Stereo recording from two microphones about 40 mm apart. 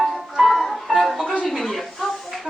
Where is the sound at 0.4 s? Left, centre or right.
Centre.